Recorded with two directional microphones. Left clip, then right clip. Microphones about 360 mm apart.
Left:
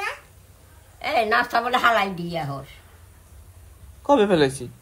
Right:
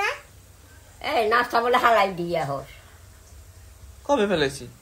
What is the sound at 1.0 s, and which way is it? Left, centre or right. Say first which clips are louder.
A woman's voice: left 1 dB; centre.